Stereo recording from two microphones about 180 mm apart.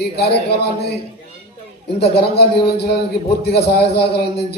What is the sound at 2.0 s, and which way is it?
A man's voice, 65° left (ahead or behind).